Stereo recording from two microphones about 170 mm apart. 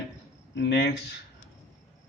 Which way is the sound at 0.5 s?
90° left.